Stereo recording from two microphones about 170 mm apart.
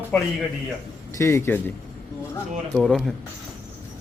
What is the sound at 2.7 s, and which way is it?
Speech, centre (ahead or behind).